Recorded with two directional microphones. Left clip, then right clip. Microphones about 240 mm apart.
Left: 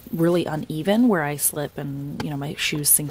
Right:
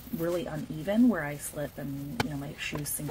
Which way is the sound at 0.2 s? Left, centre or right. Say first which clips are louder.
Left 10 dB; left.